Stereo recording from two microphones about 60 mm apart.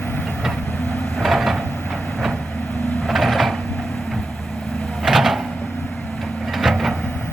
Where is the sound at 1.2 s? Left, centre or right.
Centre.